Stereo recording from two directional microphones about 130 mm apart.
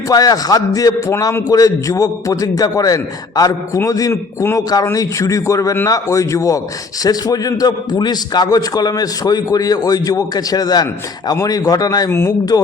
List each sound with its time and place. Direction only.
0.1 s a man's voice: 30° left (ahead or behind)